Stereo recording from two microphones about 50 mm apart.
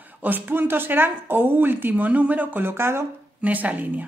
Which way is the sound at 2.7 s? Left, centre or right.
Right.